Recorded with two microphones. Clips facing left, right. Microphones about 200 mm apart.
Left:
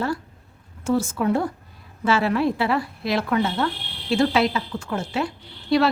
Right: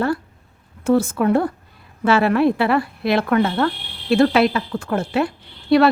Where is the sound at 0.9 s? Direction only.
60° right (ahead or behind).